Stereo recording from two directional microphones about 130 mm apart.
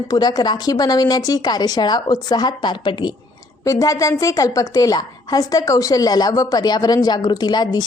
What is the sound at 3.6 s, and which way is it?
A woman's voice, 25° left (ahead or behind).